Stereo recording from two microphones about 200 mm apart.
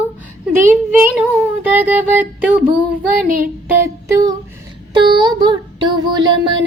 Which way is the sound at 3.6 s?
15° right (ahead or behind).